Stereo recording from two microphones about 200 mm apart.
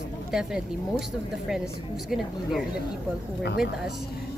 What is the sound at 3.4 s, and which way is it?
Speech, 55° left (ahead or behind).